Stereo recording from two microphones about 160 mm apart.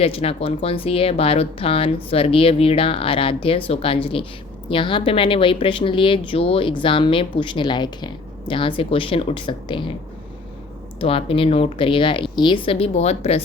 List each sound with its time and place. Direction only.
0.0 s speech: 35° left (ahead or behind)
11.0 s speech: 35° left (ahead or behind)